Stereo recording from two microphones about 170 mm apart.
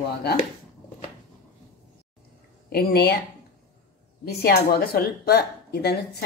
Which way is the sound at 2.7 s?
65° left (ahead or behind).